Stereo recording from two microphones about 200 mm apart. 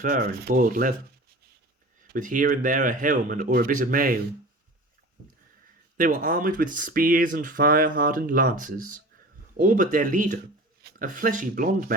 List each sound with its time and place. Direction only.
0.0 s speech: 45° right (ahead or behind)
2.1 s speech: 40° right (ahead or behind)
6.0 s speech: 45° right (ahead or behind)